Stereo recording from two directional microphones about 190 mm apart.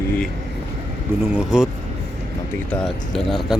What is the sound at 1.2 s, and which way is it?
Speech, 5° right (ahead or behind).